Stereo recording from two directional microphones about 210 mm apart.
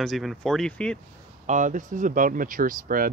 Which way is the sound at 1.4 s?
35° right (ahead or behind).